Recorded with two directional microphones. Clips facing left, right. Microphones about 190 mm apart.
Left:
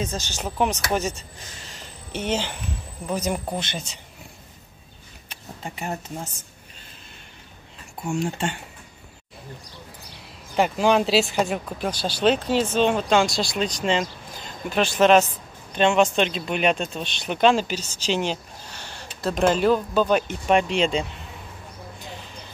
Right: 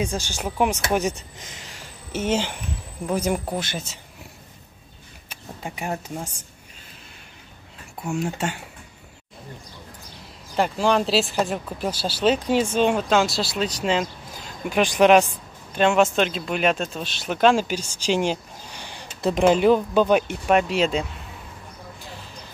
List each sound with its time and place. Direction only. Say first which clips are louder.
0.0 s speech: right 2 dB; 15° right (ahead or behind)
5.3 s speech: right 2 dB; 10° right (ahead or behind)
8.0 s speech: even; 5° right (ahead or behind)
10.5 s speech: left 1 dB; 5° left (ahead or behind)